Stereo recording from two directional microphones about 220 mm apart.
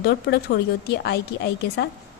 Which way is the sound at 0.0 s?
50° left (ahead or behind).